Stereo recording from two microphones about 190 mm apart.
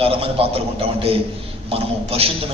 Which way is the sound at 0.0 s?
30° right (ahead or behind).